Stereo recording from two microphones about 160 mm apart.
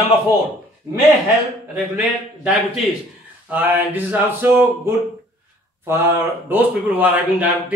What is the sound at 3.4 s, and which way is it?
Speech, 10° right (ahead or behind).